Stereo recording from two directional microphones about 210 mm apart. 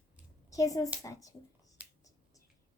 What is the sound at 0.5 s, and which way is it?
Speech, 15° left (ahead or behind).